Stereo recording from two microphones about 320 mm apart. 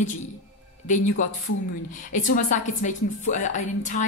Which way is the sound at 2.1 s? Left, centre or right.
Left.